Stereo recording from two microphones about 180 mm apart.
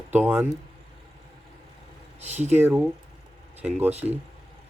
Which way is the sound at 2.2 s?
40° right (ahead or behind).